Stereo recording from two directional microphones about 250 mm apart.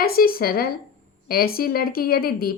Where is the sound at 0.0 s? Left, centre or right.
Left.